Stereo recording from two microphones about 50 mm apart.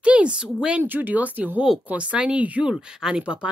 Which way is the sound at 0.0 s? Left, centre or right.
Right.